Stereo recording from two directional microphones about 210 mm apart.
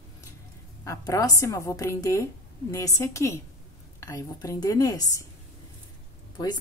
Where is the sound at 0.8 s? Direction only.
15° left (ahead or behind).